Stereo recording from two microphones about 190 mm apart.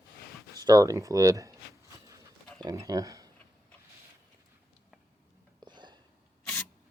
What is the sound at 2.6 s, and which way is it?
Speech, 20° right (ahead or behind).